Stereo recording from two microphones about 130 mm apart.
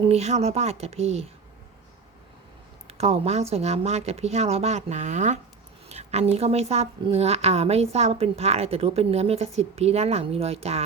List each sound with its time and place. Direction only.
0.1 s speech: 60° right (ahead or behind)
2.8 s a woman's voice: 55° right (ahead or behind)